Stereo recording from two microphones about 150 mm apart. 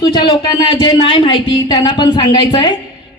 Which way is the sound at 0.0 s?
30° left (ahead or behind).